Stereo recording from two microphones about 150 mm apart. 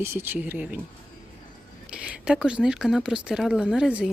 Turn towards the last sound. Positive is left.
turn(degrees=-5)  # may be behind; listen again after turning